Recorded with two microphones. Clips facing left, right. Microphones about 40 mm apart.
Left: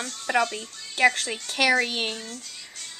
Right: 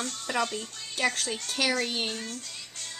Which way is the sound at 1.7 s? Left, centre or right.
Left.